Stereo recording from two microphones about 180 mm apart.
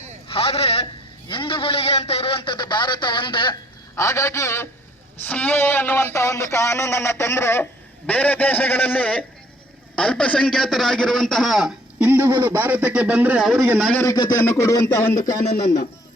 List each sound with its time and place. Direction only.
0.3 s a man's voice: 35° left (ahead or behind); by 13.8 s 10° right (ahead or behind)
13.8 s speech: 10° left (ahead or behind)